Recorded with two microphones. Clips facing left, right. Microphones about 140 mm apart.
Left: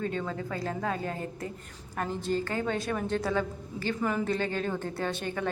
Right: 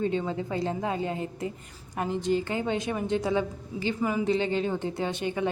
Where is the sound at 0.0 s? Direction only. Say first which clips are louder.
Right 4 dB; 20° right (ahead or behind).